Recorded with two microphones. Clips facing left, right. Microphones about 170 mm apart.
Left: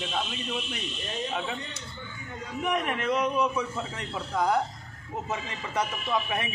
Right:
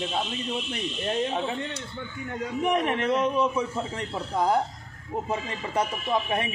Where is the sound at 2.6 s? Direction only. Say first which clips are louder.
Right 3 dB; 30° right (ahead or behind).